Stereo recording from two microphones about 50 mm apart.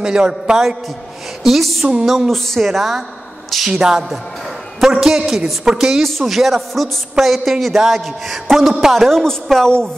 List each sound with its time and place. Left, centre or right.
0.0 s a woman's voice: centre
1.4 s a woman's voice: centre
6.0 s a woman's voice: centre